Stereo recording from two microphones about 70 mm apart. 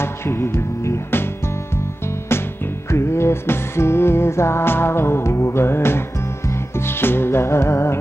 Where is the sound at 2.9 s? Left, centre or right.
Left.